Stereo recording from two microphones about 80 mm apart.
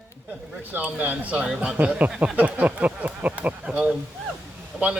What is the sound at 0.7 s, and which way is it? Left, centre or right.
A man's voice, centre.